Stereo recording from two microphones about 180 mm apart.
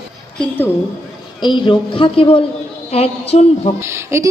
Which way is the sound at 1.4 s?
25° left (ahead or behind).